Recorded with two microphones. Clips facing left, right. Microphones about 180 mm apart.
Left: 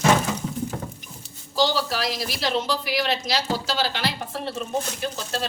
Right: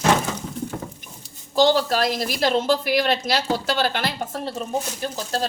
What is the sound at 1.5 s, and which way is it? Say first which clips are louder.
A woman's voice: right 5 dB; 50° right (ahead or behind).